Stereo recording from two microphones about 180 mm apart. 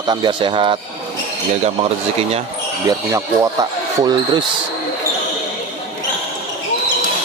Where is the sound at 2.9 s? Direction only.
15° right (ahead or behind).